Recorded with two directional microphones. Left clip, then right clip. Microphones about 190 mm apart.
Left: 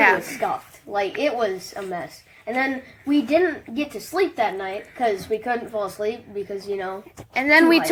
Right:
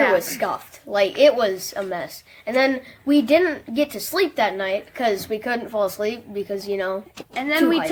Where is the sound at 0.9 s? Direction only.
30° right (ahead or behind).